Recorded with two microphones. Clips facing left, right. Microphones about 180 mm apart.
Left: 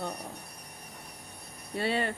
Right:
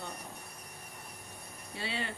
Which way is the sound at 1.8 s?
55° left (ahead or behind).